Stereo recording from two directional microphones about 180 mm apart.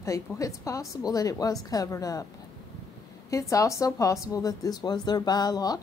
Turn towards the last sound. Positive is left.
turn(degrees=20)  # may be behind; listen again after turning